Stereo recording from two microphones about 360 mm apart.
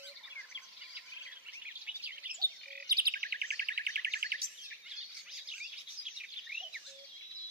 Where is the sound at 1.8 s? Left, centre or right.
Centre.